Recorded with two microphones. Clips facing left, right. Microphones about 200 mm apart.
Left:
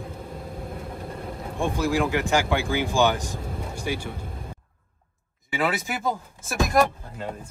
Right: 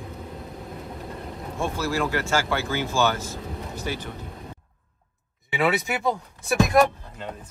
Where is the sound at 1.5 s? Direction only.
15° left (ahead or behind).